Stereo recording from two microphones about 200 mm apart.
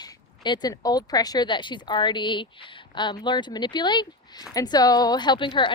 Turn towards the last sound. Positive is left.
turn(degrees=25)  # may be behind; listen again after turning